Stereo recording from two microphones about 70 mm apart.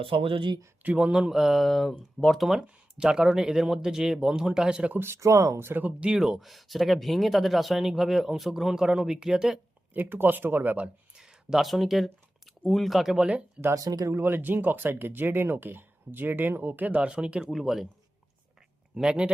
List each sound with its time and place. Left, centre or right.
0.8 s speech: centre
4.9 s speech: right
5.2 s speech: right
5.5 s speech: right
5.8 s speech: centre
9.9 s speech: right
11.1 s a sound: centre
11.5 s speech: centre
13.7 s speech: right
14.1 s speech: right; by 17.8 s centre
18.9 s speech: centre